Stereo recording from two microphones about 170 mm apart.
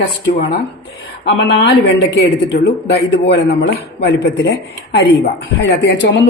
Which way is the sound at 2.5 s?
70° left (ahead or behind).